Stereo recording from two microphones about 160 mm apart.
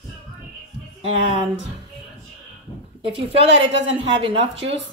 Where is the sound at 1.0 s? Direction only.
35° right (ahead or behind).